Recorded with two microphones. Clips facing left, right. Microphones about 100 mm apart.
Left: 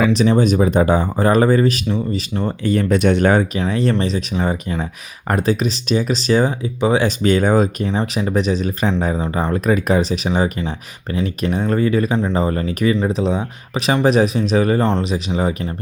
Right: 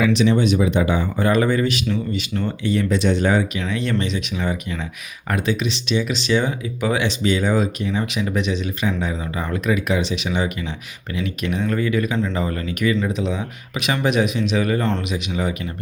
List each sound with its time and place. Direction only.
0.0 s speech: 40° left (ahead or behind)
2.6 s speech: 50° left (ahead or behind)
3.7 s speech: 35° left (ahead or behind)
7.2 s speech: 50° left (ahead or behind)